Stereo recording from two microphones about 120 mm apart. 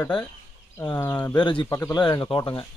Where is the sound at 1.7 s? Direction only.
25° left (ahead or behind).